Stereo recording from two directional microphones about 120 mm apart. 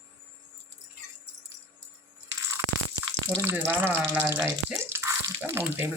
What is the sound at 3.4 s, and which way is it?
Speech, 20° right (ahead or behind).